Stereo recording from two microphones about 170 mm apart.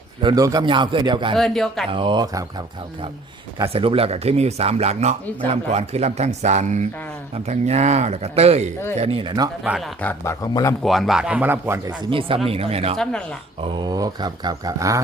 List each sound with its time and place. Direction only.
0.2 s speech: 25° right (ahead or behind)
1.4 s speech: 5° left (ahead or behind)
1.9 s speech: 30° right (ahead or behind)
3.7 s speech: 35° right (ahead or behind)
9.6 s speech: centre (ahead or behind)
10.0 s speech: 10° left (ahead or behind)
10.8 s speech: centre (ahead or behind)
11.9 s speech: 30° right (ahead or behind)
13.0 s speech: 5° left (ahead or behind)
13.6 s speech: 25° right (ahead or behind)